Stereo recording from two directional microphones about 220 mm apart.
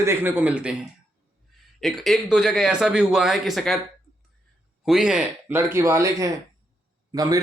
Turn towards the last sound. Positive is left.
turn(degrees=-15)  # may be behind; listen again after turning